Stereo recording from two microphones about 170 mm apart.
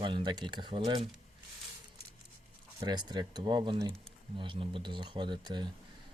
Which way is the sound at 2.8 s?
25° right (ahead or behind).